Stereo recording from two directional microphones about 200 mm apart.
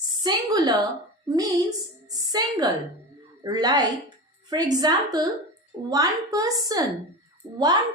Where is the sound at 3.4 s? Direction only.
20° right (ahead or behind).